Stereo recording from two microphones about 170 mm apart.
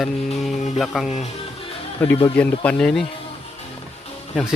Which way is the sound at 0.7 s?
Centre (ahead or behind).